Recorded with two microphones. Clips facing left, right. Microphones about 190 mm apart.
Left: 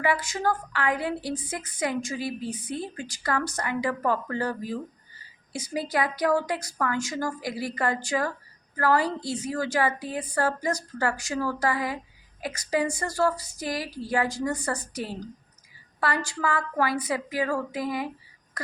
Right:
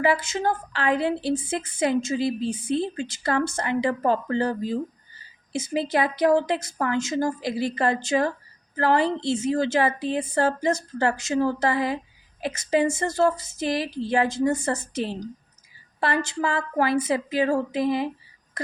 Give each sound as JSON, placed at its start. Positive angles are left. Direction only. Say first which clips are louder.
{"t": 0.0, "sound": "a woman's voice", "louder": "right 3 dB", "side_deg": -25}